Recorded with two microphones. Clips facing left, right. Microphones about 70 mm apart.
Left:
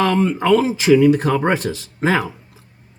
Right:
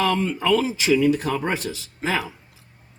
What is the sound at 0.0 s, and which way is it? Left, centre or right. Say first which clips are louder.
Speech: left 5 dB; left.